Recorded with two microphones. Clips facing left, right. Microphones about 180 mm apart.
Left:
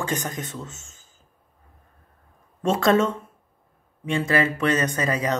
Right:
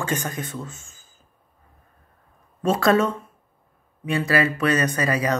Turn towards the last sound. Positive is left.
turn(degrees=20)  # may be behind; listen again after turning